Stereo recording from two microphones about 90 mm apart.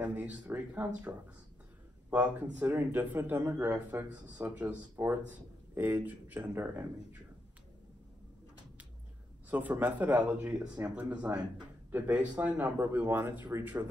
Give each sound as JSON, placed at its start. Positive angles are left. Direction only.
{"t": 0.0, "sound": "speech", "side_deg": -15}
{"t": 4.1, "sound": "speech", "side_deg": -15}
{"t": 9.5, "sound": "speech", "side_deg": -20}